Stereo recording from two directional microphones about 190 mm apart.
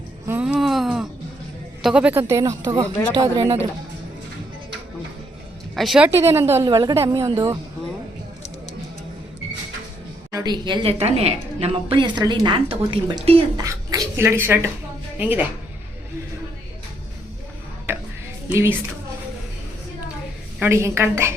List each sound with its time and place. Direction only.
0.3 s a sound: 10° right (ahead or behind)
1.8 s a woman's voice: 5° right (ahead or behind)
5.7 s a woman's voice: centre (ahead or behind)
6.1 s a woman's voice: 15° right (ahead or behind)
10.3 s a woman's voice: 20° right (ahead or behind)
18.4 s speech: 10° right (ahead or behind)
20.6 s a woman's voice: 15° right (ahead or behind)